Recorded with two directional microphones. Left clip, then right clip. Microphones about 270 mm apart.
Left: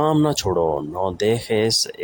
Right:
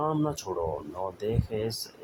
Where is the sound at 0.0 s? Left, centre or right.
Left.